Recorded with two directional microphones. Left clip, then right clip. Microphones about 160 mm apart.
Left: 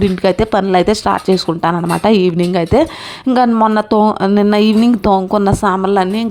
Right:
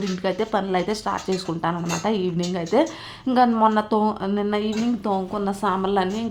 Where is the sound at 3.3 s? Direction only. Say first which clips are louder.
Left 7 dB; 35° left (ahead or behind).